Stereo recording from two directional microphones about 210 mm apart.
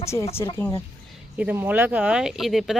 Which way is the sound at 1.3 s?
10° right (ahead or behind).